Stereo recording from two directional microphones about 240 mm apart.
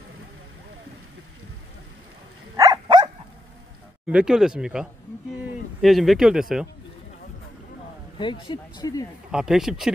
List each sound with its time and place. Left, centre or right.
2.5 s dog: centre
4.1 s speech: centre
8.2 s speech: centre
9.3 s speech: centre